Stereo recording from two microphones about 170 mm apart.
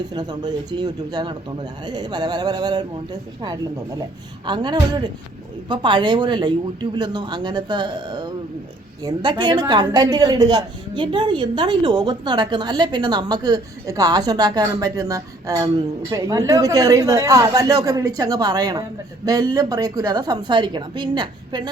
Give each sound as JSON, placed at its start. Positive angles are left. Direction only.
{"t": 0.1, "sound": "a woman's voice", "side_deg": -25}